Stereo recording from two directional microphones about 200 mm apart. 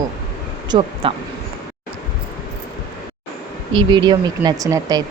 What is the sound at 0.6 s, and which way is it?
Speech, 20° right (ahead or behind).